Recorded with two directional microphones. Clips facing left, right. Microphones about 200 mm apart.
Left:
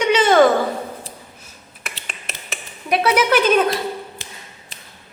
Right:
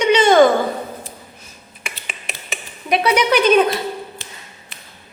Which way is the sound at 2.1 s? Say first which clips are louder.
Right 3 dB; centre (ahead or behind).